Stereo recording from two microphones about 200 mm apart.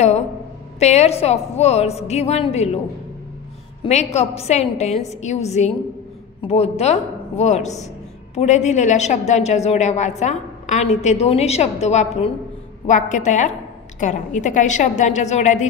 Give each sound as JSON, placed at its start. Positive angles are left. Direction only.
{"t": 0.7, "sound": "a woman's voice", "side_deg": 35}
{"t": 3.8, "sound": "a woman's voice", "side_deg": 35}